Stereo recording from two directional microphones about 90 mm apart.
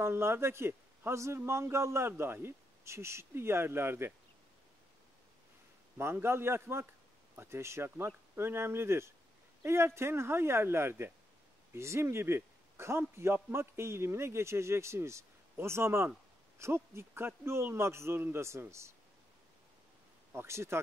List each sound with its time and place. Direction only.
0.0 s a man's voice: 30° right (ahead or behind)
5.9 s a man's voice: 30° right (ahead or behind)
20.3 s a man's voice: 30° right (ahead or behind)